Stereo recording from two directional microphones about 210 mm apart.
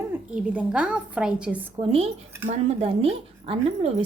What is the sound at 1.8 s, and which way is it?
Speech, 25° right (ahead or behind).